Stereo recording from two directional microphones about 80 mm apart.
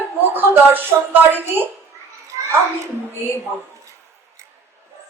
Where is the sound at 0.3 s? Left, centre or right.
Right.